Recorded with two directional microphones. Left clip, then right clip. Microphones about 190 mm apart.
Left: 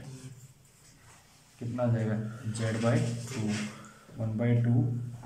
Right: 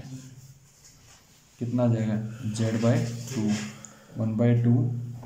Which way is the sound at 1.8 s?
20° right (ahead or behind).